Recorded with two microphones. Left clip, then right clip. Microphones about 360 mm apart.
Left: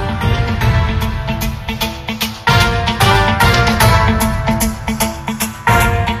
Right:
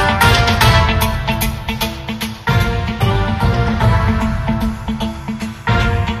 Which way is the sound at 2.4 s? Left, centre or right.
Centre.